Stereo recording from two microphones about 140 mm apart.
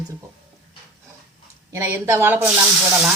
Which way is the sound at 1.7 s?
15° right (ahead or behind).